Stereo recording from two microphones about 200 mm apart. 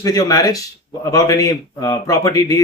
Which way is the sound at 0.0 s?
15° left (ahead or behind).